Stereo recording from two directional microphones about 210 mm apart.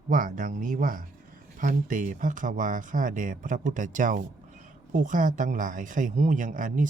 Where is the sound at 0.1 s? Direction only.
40° right (ahead or behind).